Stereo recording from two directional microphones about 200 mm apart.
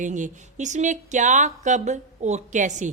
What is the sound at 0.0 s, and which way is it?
Speech, 40° right (ahead or behind).